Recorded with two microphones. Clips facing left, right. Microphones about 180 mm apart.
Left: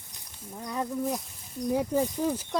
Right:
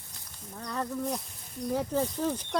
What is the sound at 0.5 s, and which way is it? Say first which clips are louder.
Speech: left 2 dB; 15° left (ahead or behind).